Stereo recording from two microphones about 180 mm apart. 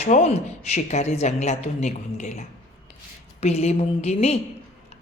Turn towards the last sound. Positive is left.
turn(degrees=35)  # may be behind; listen again after turning